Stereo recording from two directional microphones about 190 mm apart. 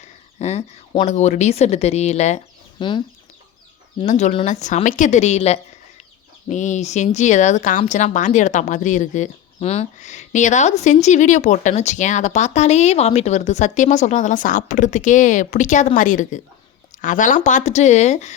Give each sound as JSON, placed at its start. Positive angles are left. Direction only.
{"t": 0.0, "sound": "speech", "side_deg": 35}
{"t": 4.0, "sound": "a woman's voice", "side_deg": 40}